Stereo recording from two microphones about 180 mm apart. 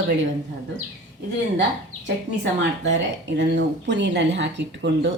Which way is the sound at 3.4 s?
75° right (ahead or behind).